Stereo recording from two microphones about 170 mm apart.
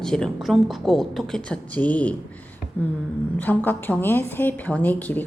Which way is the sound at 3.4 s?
10° left (ahead or behind).